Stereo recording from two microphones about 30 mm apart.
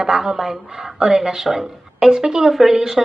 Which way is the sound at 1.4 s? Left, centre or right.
Centre.